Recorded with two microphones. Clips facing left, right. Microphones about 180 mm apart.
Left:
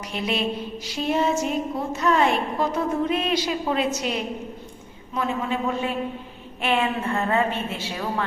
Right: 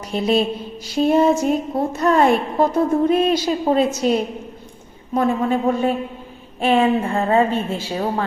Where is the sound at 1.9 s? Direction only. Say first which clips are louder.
Right 5 dB; 45° right (ahead or behind).